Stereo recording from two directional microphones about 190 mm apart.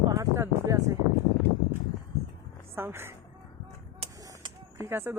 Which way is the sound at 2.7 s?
10° right (ahead or behind).